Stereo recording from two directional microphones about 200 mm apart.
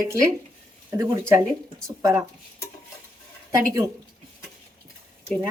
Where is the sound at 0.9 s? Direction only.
15° right (ahead or behind).